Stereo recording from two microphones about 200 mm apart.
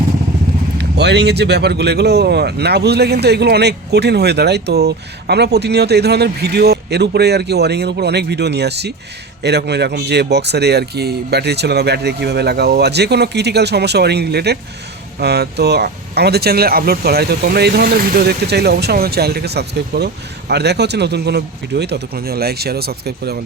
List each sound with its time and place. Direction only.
0.8 s speech: 55° right (ahead or behind)